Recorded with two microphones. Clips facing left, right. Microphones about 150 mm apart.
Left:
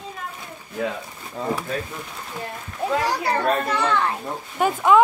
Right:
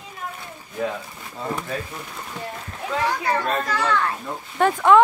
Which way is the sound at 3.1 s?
35° left (ahead or behind).